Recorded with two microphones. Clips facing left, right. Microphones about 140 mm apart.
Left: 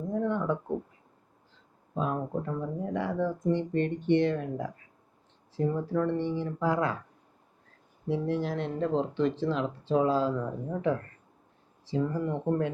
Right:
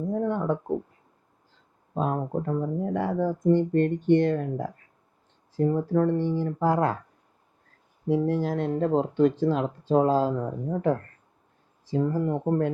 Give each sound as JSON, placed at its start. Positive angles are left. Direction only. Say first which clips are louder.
{"t": 0.1, "sound": "a sound", "louder": "right 2 dB", "side_deg": -45}
{"t": 2.0, "sound": "speech", "louder": "right 3 dB", "side_deg": -45}
{"t": 8.0, "sound": "speech", "louder": "right 5 dB", "side_deg": -45}